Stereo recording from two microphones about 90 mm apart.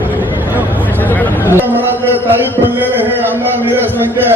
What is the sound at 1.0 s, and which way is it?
Chatter, 20° left (ahead or behind).